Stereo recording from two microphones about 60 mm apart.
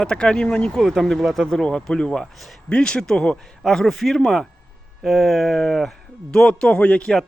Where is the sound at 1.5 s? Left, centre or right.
Centre.